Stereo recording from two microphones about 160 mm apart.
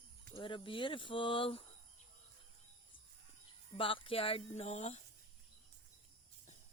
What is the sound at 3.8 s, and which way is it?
Speech, 35° left (ahead or behind).